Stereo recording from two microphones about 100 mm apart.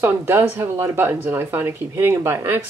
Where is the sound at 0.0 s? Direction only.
20° right (ahead or behind).